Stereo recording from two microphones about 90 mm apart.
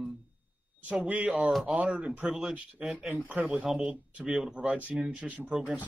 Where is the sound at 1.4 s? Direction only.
5° right (ahead or behind).